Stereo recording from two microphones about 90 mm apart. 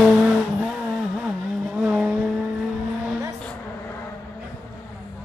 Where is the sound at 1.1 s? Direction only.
15° right (ahead or behind).